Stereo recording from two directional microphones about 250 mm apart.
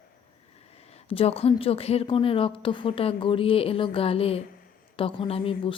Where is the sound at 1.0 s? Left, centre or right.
Left.